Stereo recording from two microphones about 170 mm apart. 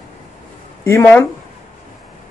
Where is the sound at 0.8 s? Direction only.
15° left (ahead or behind).